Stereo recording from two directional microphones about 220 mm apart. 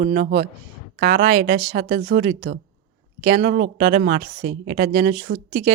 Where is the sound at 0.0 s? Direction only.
40° right (ahead or behind).